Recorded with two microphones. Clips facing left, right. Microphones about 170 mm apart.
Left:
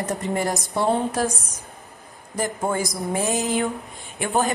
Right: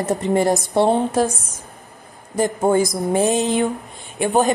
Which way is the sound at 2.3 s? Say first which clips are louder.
Right 7 dB; 25° right (ahead or behind).